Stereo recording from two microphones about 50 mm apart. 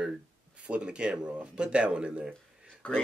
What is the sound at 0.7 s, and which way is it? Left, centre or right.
Speech, right.